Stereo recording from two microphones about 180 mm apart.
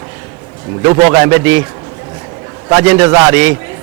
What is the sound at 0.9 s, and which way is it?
Speech, 20° right (ahead or behind).